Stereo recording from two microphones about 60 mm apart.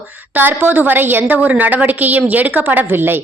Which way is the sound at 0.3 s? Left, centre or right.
Right.